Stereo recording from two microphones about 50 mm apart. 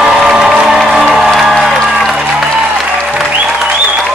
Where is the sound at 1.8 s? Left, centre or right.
Centre.